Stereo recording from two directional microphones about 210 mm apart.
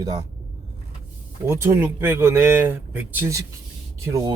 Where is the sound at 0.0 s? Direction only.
15° right (ahead or behind).